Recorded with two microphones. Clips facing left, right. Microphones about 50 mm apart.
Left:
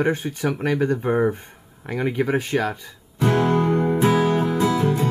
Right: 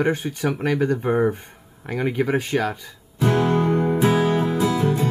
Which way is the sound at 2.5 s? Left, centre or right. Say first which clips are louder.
Even; centre.